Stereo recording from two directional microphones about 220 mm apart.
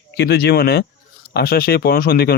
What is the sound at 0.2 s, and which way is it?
Speech, 50° left (ahead or behind).